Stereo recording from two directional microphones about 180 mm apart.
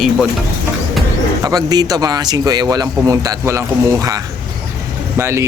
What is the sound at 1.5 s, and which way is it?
Speech, 20° right (ahead or behind).